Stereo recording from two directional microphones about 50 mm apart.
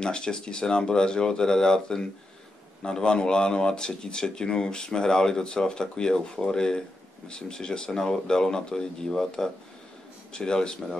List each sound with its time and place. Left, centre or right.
0.0 s speech: centre